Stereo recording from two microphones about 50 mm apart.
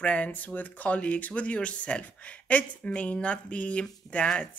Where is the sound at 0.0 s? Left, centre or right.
Left.